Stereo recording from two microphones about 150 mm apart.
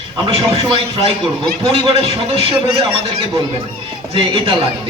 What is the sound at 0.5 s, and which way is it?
A man's voice, 35° right (ahead or behind).